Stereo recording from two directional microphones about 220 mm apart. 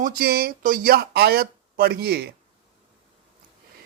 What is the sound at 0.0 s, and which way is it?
Speech, 45° right (ahead or behind).